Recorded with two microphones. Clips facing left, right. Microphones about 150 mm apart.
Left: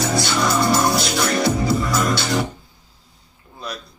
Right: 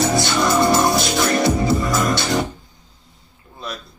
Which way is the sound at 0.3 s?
Centre (ahead or behind).